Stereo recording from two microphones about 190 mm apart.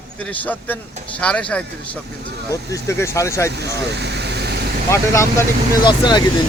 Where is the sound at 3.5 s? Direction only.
60° right (ahead or behind).